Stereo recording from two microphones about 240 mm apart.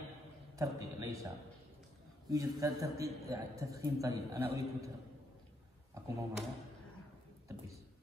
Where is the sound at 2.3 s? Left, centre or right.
Centre.